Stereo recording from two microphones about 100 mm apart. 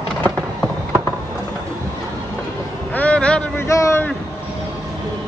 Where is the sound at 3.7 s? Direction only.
30° left (ahead or behind).